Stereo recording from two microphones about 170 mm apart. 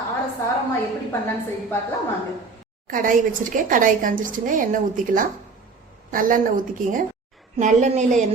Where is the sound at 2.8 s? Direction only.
55° right (ahead or behind).